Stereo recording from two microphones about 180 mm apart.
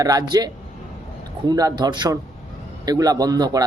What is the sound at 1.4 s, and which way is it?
Speech, 20° right (ahead or behind).